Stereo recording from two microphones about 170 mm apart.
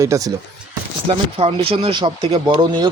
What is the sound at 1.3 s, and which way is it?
Speech, 35° right (ahead or behind).